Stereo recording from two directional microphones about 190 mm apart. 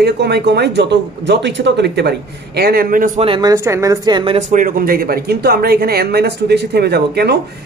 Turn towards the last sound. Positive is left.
turn(degrees=-60)  # may be behind; listen again after turning